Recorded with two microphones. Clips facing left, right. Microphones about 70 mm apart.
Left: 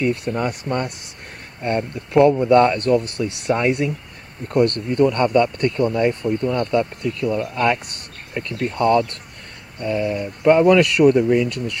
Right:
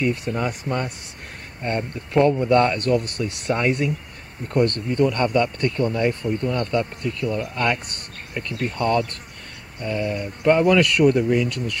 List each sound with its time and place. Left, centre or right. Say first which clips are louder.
0.0 s speech: left 2 dB; centre
5.0 s speech: left 3 dB; centre
5.3 s speech: left 4 dB; centre